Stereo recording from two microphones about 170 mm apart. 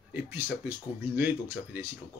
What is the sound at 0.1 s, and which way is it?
Speech, 10° right (ahead or behind).